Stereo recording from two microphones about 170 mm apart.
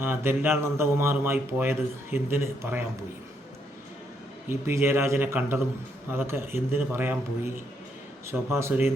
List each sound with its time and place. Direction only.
0.0 s speech: 15° right (ahead or behind)
4.4 s speech: 15° right (ahead or behind)